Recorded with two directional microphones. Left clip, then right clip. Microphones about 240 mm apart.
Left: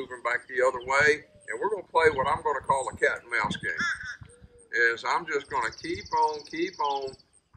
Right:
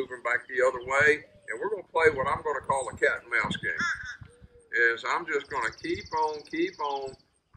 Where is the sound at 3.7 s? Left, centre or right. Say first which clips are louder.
Even; left.